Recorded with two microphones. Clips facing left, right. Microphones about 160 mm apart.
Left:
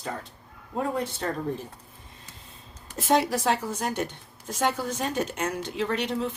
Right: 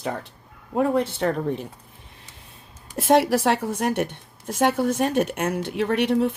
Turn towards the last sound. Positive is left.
turn(degrees=-60)  # may be behind; listen again after turning